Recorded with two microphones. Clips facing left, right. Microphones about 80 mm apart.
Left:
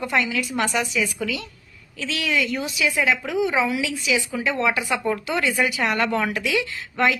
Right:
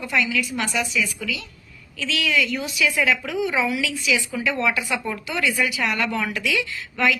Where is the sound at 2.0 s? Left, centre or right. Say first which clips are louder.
Right 1 dB; left.